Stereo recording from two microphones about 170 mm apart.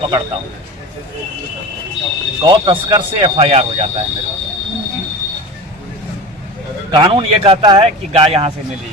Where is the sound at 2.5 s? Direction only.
25° right (ahead or behind).